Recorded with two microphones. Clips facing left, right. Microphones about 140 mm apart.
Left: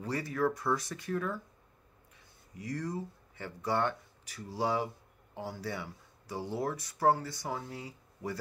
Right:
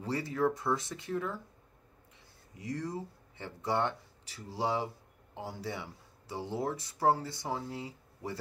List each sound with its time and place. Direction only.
0.0 s speech: 25° right (ahead or behind)
2.5 s speech: 25° right (ahead or behind)